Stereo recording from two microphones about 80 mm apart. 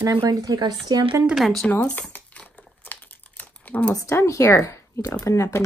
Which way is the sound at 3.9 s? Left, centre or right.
Left.